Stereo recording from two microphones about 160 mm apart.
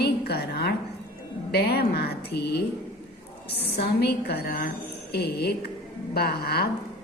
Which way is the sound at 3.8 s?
85° left.